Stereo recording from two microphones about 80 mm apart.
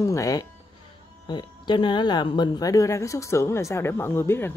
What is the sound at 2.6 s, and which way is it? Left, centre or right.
A woman's voice, left.